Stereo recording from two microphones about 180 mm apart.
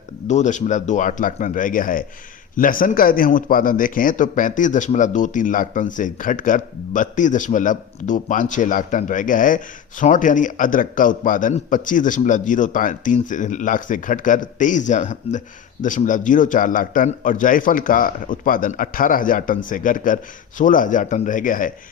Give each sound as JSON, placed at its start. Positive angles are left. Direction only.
{"t": 0.3, "sound": "a man's voice", "side_deg": 40}